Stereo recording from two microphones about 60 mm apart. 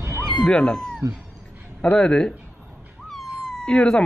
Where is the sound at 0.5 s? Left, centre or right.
Centre.